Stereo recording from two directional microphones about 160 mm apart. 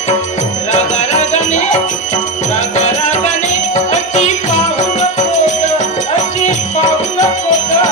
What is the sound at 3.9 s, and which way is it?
Jingle bell, 45° left (ahead or behind).